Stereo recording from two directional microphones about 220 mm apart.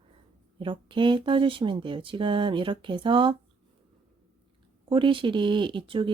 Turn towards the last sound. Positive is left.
turn(degrees=-25)  # may be behind; listen again after turning